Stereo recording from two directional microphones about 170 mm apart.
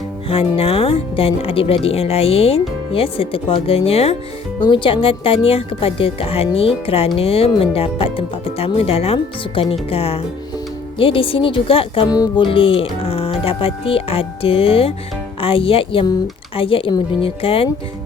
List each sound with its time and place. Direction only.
0.3 s speech: 35° left (ahead or behind)